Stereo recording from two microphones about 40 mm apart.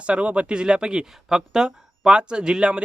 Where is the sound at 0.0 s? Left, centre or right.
Right.